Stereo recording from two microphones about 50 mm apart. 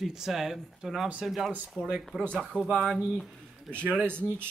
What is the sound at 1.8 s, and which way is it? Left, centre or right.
Speech, right.